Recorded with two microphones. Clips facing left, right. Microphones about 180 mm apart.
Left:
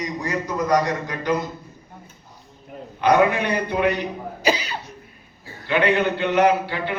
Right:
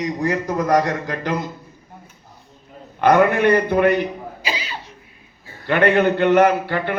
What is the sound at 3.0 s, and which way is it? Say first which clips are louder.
Speech: right 3 dB; 55° right (ahead or behind).